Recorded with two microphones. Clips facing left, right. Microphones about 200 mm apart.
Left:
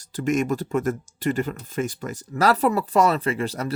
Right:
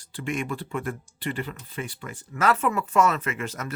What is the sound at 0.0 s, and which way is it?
Speech, 40° left (ahead or behind).